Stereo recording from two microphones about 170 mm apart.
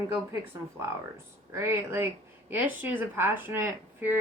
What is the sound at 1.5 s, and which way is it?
Speech, 15° right (ahead or behind).